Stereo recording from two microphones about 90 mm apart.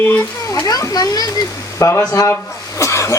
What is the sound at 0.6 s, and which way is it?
A child's voice, 45° left (ahead or behind).